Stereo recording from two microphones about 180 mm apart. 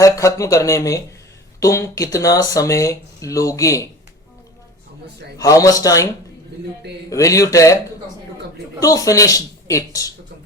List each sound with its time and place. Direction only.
0.0 s speech: 15° left (ahead or behind)
5.4 s speech: 20° left (ahead or behind)
7.1 s speech: 20° left (ahead or behind)
8.8 s speech: 20° left (ahead or behind)